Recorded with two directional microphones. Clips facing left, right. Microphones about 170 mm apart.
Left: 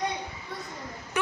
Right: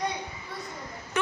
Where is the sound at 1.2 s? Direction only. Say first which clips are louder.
Even; 15° left (ahead or behind).